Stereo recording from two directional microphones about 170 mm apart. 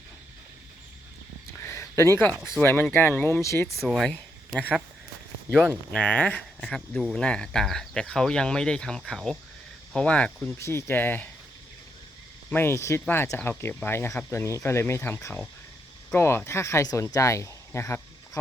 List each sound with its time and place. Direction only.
1.5 s a sound: 15° left (ahead or behind)
2.6 s speech: 10° left (ahead or behind)
3.8 s speech: centre (ahead or behind)
12.5 s speech: 15° left (ahead or behind)